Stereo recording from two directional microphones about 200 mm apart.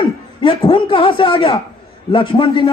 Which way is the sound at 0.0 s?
25° left (ahead or behind).